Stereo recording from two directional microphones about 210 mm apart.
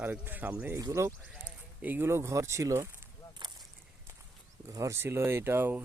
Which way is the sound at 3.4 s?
20° right (ahead or behind).